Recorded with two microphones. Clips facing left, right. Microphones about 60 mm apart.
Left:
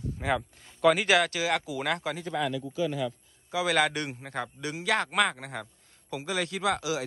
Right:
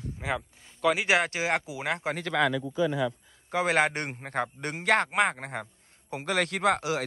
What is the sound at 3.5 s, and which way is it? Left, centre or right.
A man's voice, right.